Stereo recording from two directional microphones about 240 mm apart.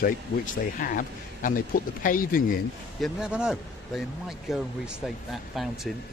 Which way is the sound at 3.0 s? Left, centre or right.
Centre.